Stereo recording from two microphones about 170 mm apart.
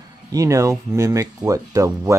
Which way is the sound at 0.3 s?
20° right (ahead or behind).